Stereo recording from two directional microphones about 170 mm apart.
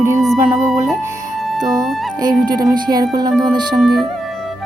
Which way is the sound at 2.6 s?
25° right (ahead or behind).